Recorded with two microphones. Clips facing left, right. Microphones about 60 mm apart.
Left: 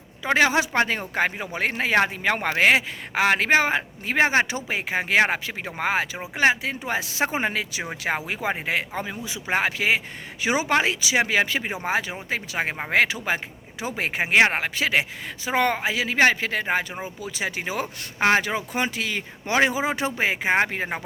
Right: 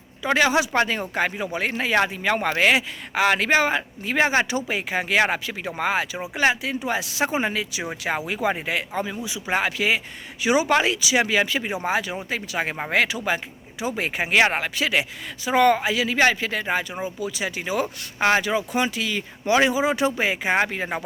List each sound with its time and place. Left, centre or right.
0.2 s speech: left
8.3 s speech: left